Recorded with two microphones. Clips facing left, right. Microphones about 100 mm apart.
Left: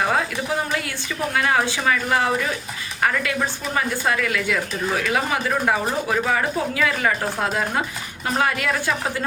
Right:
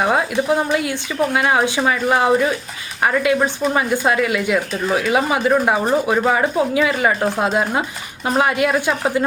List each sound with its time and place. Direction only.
0.7 s speech: 20° right (ahead or behind)